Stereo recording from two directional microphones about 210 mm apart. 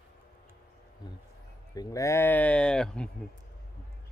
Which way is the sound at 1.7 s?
15° left (ahead or behind).